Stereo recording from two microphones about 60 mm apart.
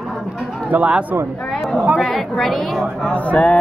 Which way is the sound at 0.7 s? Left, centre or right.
Right.